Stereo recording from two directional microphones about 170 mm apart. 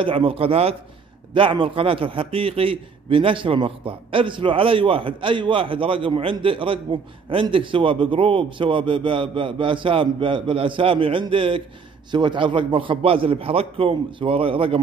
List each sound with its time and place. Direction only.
0.0 s a man's voice: 30° right (ahead or behind)